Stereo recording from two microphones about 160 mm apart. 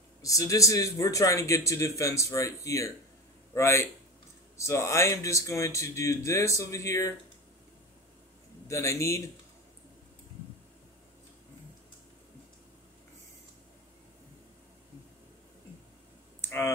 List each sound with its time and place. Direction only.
0.2 s a man's voice: 20° left (ahead or behind)
8.6 s a man's voice: 20° left (ahead or behind)
16.3 s a sound: 15° left (ahead or behind)